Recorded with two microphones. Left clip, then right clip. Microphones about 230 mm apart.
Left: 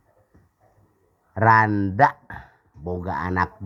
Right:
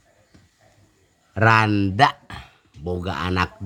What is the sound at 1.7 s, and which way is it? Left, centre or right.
Speech, right.